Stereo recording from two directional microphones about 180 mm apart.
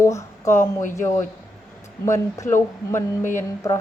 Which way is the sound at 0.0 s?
15° left (ahead or behind).